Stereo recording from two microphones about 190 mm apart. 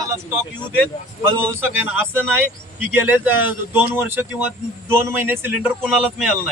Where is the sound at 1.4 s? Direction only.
10° right (ahead or behind).